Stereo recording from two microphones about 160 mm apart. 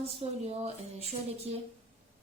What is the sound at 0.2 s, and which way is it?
Speech, 40° right (ahead or behind).